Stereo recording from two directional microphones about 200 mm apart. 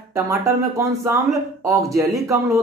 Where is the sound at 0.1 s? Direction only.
15° right (ahead or behind).